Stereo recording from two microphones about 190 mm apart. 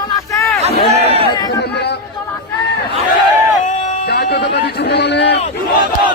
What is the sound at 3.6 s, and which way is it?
Music, 40° left (ahead or behind).